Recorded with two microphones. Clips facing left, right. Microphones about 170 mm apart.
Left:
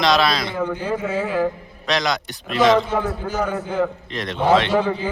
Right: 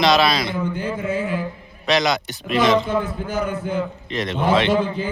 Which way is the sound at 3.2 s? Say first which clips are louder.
Left 1 dB; 55° right (ahead or behind).